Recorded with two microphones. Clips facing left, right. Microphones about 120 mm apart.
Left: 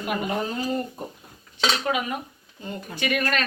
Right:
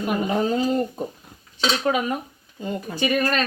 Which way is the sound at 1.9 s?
35° right (ahead or behind).